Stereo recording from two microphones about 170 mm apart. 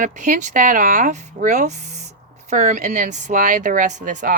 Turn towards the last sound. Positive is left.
turn(degrees=-45)  # may be behind; listen again after turning